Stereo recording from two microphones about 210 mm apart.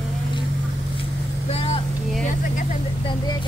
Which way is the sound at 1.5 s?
30° left (ahead or behind).